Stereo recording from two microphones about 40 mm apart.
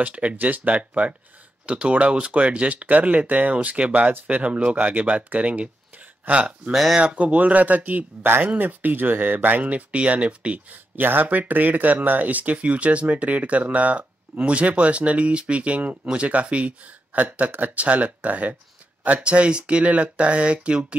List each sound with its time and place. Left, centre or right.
0.0 s speech: right
4.8 s speech: right
6.7 s speech: centre
7.0 s speech: right
11.0 s speech: right
11.2 s speech: right
19.2 s speech: right